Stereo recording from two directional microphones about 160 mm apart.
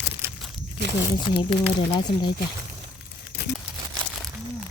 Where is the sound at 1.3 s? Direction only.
30° left (ahead or behind).